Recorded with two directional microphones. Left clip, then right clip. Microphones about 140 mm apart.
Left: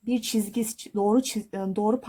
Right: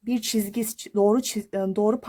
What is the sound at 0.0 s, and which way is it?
Speech, 45° right (ahead or behind).